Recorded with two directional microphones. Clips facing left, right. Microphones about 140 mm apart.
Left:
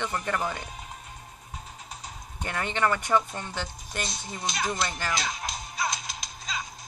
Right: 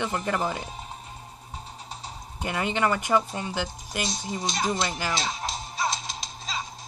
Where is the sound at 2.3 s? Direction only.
5° right (ahead or behind).